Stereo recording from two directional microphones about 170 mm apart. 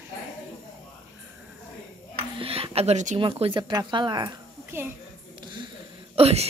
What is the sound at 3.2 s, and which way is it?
Speech, 30° right (ahead or behind).